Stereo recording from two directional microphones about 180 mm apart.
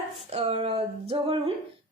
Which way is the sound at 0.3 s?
35° right (ahead or behind).